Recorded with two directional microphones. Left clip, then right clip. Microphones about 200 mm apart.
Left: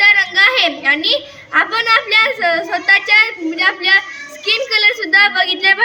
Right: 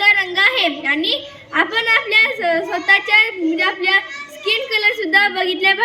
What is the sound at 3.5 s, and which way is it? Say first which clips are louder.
Speech: left 5 dB; centre (ahead or behind).